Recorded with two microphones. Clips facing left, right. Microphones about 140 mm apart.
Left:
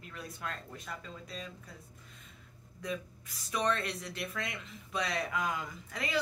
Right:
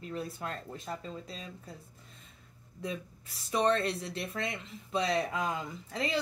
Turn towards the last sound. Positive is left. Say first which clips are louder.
# right 2 dB
turn(degrees=-30)  # may be behind; listen again after turning